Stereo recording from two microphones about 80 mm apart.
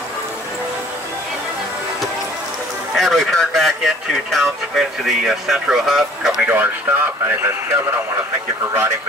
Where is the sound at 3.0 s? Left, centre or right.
Centre.